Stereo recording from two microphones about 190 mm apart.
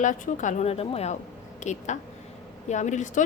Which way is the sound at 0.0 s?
40° left (ahead or behind).